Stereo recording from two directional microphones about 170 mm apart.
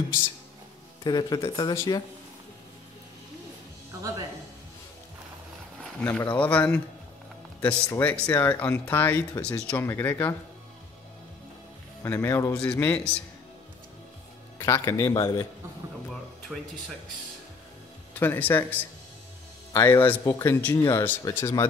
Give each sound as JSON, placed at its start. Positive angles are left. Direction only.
{"t": 1.0, "sound": "speech", "side_deg": 25}
{"t": 5.9, "sound": "speech", "side_deg": 10}
{"t": 12.0, "sound": "speech", "side_deg": 15}
{"t": 14.6, "sound": "speech", "side_deg": 20}
{"t": 16.5, "sound": "speech", "side_deg": -5}
{"t": 18.2, "sound": "speech", "side_deg": 15}